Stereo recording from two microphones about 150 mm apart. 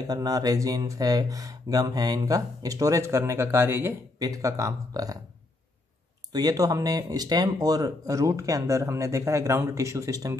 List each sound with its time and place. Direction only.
0.0 s speech: 25° right (ahead or behind)
6.3 s speech: 25° right (ahead or behind)